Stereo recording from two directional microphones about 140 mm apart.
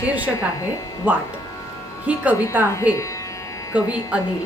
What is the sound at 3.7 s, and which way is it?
Speech, 10° right (ahead or behind).